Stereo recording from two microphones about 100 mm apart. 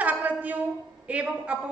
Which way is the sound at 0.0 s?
15° right (ahead or behind).